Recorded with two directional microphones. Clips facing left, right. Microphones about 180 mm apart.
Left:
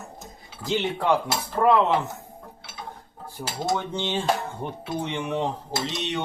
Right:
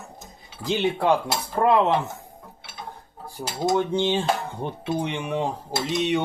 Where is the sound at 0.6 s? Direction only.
15° right (ahead or behind).